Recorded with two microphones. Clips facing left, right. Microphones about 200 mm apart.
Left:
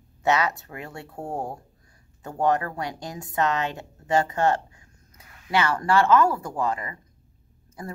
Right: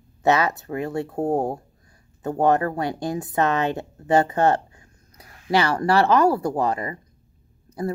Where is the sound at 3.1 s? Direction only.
35° right (ahead or behind).